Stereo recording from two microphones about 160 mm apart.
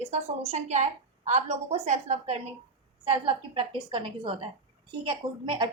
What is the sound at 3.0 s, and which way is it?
A woman's voice, 35° right (ahead or behind).